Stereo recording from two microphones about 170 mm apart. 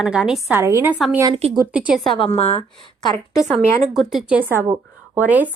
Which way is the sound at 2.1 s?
30° left (ahead or behind).